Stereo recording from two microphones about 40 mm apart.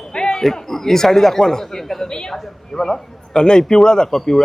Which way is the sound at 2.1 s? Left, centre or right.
Centre.